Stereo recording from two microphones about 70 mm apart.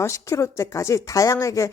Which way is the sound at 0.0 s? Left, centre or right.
Left.